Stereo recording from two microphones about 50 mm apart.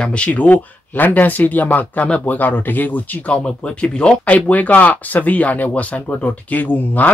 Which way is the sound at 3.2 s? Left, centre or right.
Left.